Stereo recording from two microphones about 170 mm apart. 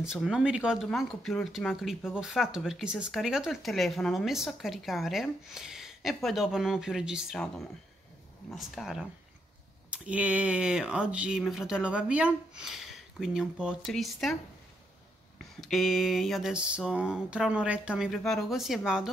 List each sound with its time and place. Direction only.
0.0 s speech: 5° right (ahead or behind)
15.6 s speech: centre (ahead or behind)